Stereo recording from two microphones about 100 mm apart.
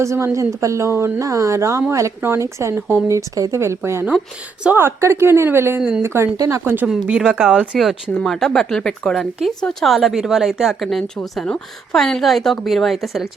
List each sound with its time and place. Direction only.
0.0 s speech: 30° right (ahead or behind)
6.8 s speech: 5° right (ahead or behind)